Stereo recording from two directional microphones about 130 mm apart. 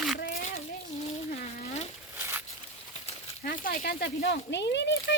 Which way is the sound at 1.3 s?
55° left (ahead or behind).